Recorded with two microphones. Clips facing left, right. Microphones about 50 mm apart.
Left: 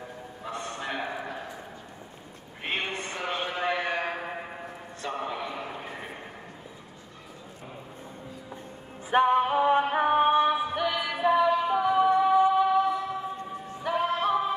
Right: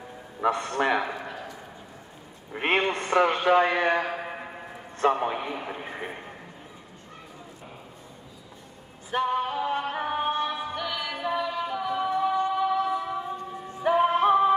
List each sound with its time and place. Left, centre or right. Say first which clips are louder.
0.4 s a man's voice: right 11 dB; right
2.5 s a man's voice: right 7 dB; right
5.0 s a man's voice: right 8 dB; right
9.1 s music: left 5 dB; left
13.8 s music: right 6 dB; centre